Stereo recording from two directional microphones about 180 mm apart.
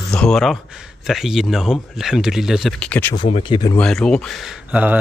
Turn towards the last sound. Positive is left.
turn(degrees=-10)  # may be behind; listen again after turning